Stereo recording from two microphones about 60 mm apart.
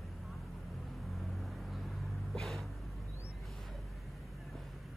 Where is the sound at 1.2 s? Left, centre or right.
Centre.